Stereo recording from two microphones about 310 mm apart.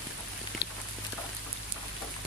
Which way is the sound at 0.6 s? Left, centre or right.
Left.